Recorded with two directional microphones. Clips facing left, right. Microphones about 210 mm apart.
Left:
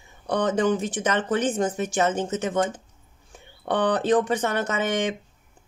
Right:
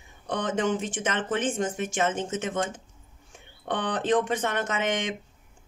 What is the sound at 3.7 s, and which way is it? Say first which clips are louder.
Speech: left 4 dB; 40° left (ahead or behind).